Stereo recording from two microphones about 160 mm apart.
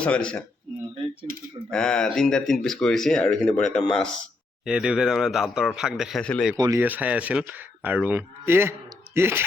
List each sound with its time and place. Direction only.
0.0 s speech: 5° left (ahead or behind)
1.7 s speech: 5° left (ahead or behind)
6.6 s speech: 20° right (ahead or behind)
6.8 s speech: 10° right (ahead or behind)